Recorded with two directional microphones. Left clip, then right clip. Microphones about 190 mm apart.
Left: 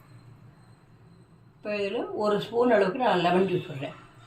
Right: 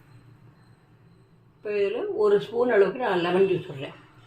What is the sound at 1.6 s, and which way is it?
Speech, 15° right (ahead or behind).